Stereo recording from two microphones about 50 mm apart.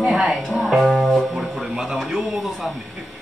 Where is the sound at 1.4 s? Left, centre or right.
Centre.